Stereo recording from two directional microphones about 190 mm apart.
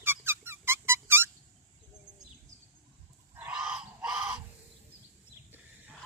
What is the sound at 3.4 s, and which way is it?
Fowl, 5° right (ahead or behind).